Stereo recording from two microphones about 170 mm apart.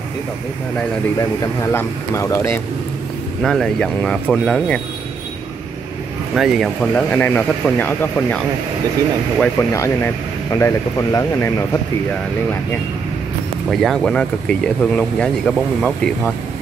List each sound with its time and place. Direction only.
1.6 s speech: 15° left (ahead or behind)
3.4 s speech: centre (ahead or behind)
6.3 s speech: centre (ahead or behind)
9.6 s speech: 15° left (ahead or behind)
13.7 s speech: centre (ahead or behind)